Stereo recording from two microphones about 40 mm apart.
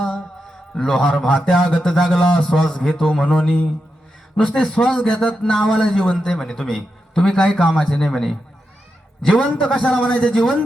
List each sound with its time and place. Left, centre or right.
0.9 s a man's voice: centre